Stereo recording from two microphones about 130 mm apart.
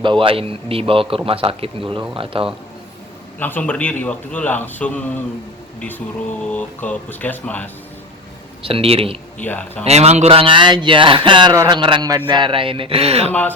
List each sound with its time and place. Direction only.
0.0 s a man's voice: 40° right (ahead or behind)
3.4 s a man's voice: 15° left (ahead or behind)
6.4 s a man's voice: 10° left (ahead or behind)
8.6 s a man's voice: 45° right (ahead or behind)
9.4 s a man's voice: 10° left (ahead or behind)
9.8 s a man's voice: 55° right (ahead or behind)